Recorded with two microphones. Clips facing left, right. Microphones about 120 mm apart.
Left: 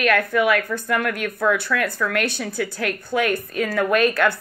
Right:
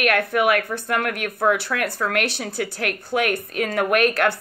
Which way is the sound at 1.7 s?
60° right (ahead or behind).